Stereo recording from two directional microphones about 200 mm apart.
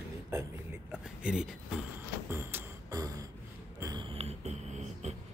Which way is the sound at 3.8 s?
20° right (ahead or behind).